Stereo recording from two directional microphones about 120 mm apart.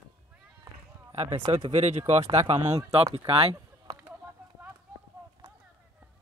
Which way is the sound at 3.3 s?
50° right (ahead or behind).